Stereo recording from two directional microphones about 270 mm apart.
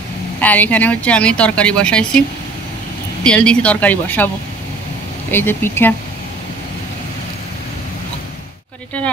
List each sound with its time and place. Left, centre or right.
0.4 s a woman's voice: centre
3.3 s a woman's voice: centre
5.3 s speech: centre